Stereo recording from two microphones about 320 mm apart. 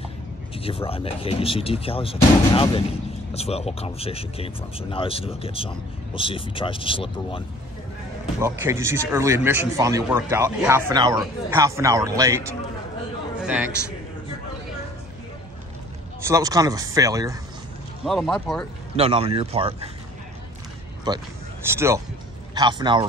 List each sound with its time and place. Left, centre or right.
0.6 s speech: centre
8.4 s a man's voice: centre
16.3 s speech: centre
18.0 s speech: centre
18.9 s speech: centre
21.1 s a man's voice: centre